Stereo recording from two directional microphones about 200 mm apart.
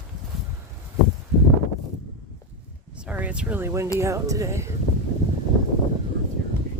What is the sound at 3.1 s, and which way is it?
Speech, 5° right (ahead or behind).